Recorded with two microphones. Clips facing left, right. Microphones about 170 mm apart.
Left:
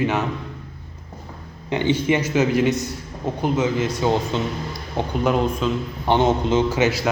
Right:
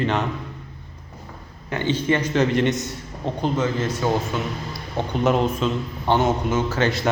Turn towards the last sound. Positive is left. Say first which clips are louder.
# left 2 dB
turn(degrees=5)  # may be behind; listen again after turning